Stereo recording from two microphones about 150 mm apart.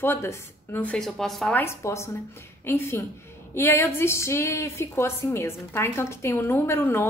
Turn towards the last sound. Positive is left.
turn(degrees=15)  # may be behind; listen again after turning